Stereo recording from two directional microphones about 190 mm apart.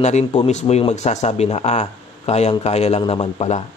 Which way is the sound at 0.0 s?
35° left (ahead or behind).